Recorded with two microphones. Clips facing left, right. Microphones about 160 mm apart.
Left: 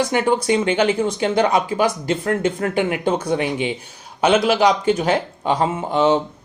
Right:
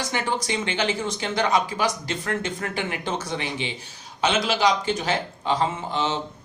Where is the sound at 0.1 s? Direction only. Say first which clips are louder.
Left 9 dB; 50° left (ahead or behind).